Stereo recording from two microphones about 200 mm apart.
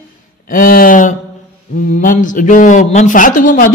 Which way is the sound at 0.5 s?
45° left (ahead or behind).